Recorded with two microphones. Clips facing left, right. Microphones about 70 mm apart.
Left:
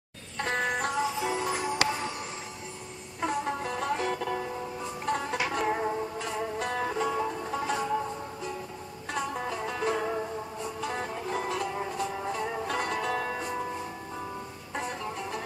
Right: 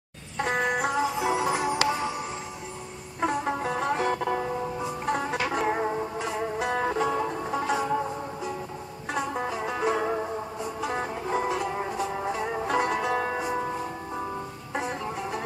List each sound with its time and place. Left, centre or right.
0.4 s music: centre
3.2 s music: centre
5.7 s music: centre
6.2 s music: centre
9.7 s music: centre
14.8 s music: centre